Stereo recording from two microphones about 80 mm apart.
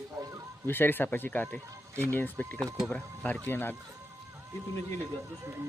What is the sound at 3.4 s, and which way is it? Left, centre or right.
Speech, left.